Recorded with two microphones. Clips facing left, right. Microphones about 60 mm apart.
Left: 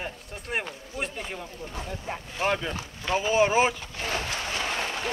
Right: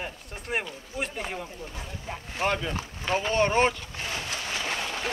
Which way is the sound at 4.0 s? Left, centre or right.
Left.